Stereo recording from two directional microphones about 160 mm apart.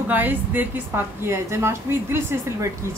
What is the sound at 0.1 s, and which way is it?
A woman's voice, 10° right (ahead or behind).